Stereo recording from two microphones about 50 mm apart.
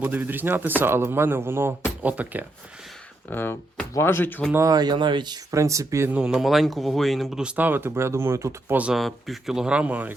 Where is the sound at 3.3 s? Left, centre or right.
Left.